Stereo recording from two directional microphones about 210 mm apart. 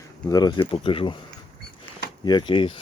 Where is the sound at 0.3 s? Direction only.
20° left (ahead or behind).